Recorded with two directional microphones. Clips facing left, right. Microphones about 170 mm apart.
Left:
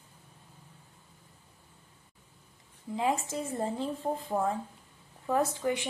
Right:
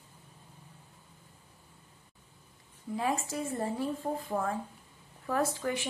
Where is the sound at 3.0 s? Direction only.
20° left (ahead or behind).